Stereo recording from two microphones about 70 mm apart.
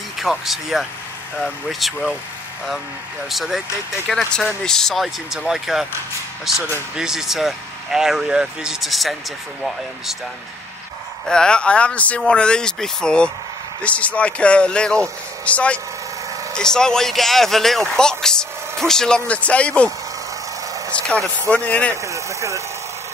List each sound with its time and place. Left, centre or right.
0.2 s speech: centre
3.3 s speech: centre
11.2 s speech: centre
20.9 s a man's voice: centre
21.9 s speech: right